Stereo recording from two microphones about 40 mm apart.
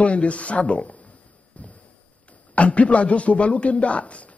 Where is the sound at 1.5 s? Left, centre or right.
Left.